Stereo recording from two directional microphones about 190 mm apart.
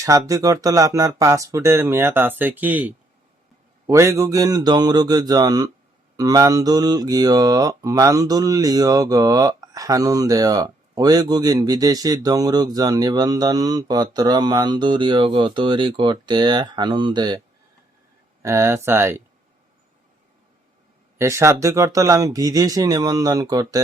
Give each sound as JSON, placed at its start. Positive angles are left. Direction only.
{"t": 0.0, "sound": "speech", "side_deg": -20}
{"t": 18.4, "sound": "speech", "side_deg": -15}
{"t": 21.2, "sound": "speech", "side_deg": -15}